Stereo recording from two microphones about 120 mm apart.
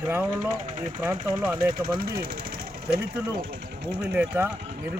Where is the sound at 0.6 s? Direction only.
90° right.